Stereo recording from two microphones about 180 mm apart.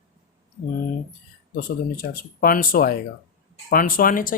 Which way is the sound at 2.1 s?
55° left (ahead or behind).